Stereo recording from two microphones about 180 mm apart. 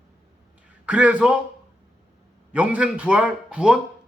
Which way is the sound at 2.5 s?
5° right (ahead or behind).